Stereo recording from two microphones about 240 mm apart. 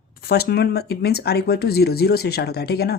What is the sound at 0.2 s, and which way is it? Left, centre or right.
Speech, left.